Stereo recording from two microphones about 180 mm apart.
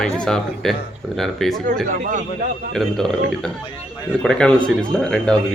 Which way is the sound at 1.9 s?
50° right (ahead or behind).